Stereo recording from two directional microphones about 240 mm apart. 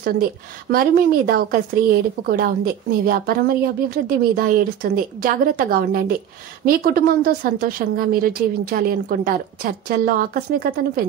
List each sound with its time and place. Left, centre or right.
0.0 s a woman's voice: right